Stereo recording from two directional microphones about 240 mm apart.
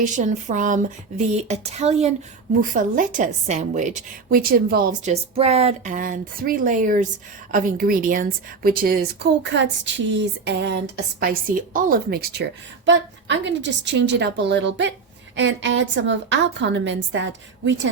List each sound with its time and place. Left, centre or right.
0.0 s a woman's voice: right